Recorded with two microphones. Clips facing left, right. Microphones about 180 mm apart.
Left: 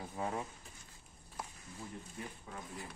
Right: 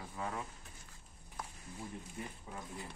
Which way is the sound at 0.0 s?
35° left (ahead or behind).